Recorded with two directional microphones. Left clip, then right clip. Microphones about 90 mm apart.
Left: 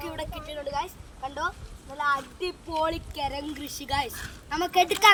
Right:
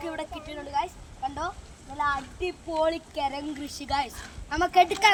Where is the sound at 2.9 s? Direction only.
20° right (ahead or behind).